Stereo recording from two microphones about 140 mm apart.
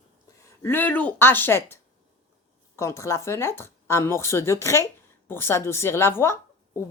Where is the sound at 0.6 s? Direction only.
15° left (ahead or behind).